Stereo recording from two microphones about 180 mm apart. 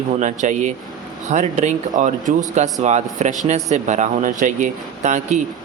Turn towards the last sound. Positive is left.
turn(degrees=-40)  # may be behind; listen again after turning